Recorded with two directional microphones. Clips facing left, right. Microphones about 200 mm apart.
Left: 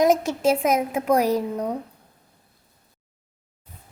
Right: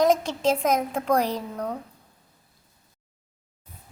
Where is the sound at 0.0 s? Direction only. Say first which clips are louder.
Left 2 dB; 10° left (ahead or behind).